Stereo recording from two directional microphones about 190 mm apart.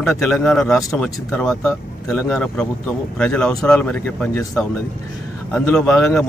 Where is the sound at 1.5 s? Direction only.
15° left (ahead or behind).